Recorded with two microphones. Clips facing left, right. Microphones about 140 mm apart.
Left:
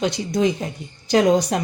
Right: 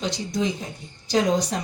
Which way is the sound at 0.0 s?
60° left (ahead or behind).